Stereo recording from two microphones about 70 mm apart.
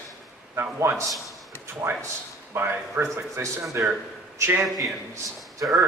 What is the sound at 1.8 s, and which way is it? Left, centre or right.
Speech, centre.